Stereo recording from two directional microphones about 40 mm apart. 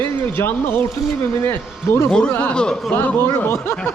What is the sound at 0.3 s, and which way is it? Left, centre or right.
Speech, left.